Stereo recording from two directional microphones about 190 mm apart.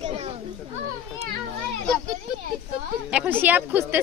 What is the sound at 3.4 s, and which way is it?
Speech, 10° right (ahead or behind).